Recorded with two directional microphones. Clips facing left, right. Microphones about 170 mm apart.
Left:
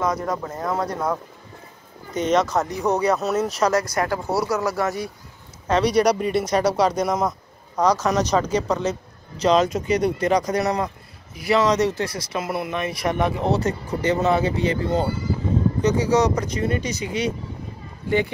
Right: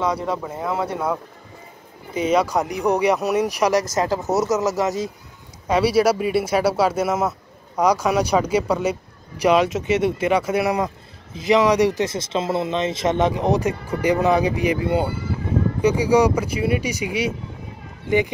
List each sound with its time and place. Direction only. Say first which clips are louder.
0.1 s speech: right 1 dB; 10° right (ahead or behind)
5.7 s speech: right 1 dB; 5° right (ahead or behind)